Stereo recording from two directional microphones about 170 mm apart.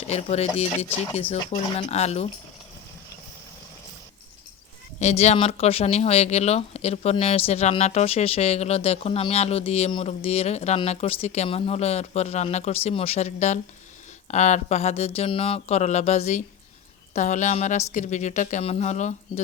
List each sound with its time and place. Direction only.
0.1 s speech: 40° left (ahead or behind)
4.9 s speech: 40° left (ahead or behind)